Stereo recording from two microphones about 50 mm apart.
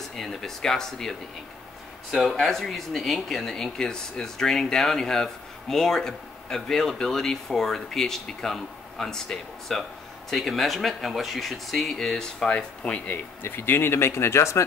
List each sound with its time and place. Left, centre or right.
0.1 s speech: centre
2.0 s speech: centre
12.4 s speech: left
13.1 s speech: left